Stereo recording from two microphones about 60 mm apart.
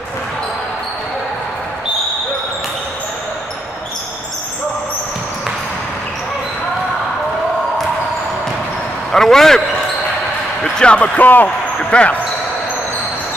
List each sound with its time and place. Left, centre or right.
9.1 s a man's voice: centre
10.6 s speech: centre
11.4 s basketball bounce: centre